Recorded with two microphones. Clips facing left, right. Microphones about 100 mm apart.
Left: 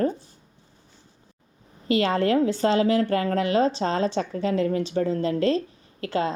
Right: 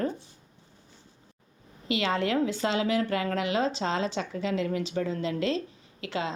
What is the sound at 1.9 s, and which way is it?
A woman's voice, 40° left (ahead or behind).